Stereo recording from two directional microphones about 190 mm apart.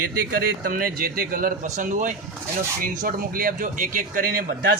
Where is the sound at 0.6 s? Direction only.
50° right (ahead or behind).